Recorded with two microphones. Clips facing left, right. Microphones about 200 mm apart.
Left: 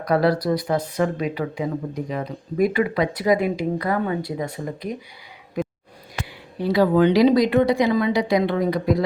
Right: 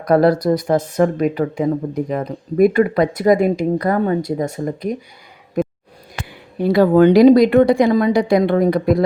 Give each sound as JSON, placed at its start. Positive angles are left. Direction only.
{"t": 0.0, "sound": "speech", "side_deg": -50}
{"t": 6.6, "sound": "speech", "side_deg": -50}